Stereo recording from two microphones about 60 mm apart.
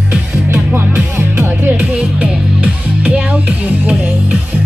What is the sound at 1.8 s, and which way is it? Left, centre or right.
Music, right.